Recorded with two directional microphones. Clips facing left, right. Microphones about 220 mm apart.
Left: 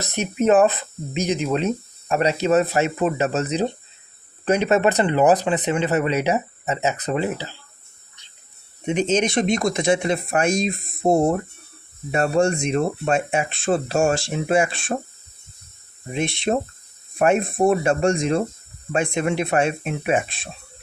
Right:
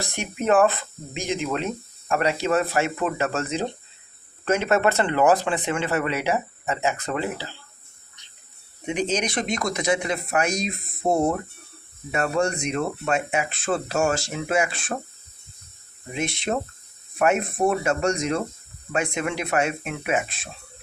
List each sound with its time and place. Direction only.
0.0 s speech: 20° left (ahead or behind)
8.9 s speech: 25° left (ahead or behind)
16.1 s speech: 25° left (ahead or behind)